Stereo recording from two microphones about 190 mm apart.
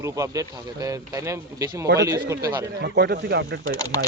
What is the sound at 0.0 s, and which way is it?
A man's voice, 15° right (ahead or behind).